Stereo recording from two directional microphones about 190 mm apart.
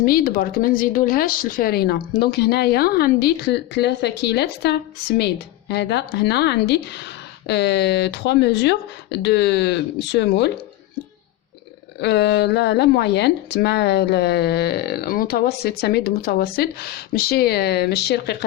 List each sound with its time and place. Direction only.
0.0 s speech: 50° left (ahead or behind)
11.9 s speech: 65° left (ahead or behind)